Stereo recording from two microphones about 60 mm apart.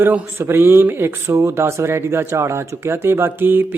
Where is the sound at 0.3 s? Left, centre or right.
Right.